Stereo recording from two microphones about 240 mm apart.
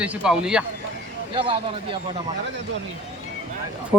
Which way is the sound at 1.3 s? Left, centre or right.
Right.